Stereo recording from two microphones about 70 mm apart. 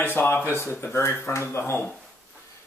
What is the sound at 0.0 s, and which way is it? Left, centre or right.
Speech, left.